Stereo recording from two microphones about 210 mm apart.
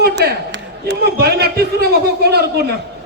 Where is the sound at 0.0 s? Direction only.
55° right (ahead or behind).